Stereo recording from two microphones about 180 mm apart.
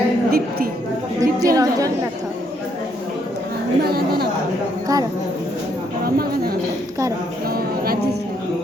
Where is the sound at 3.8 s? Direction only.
60° right (ahead or behind).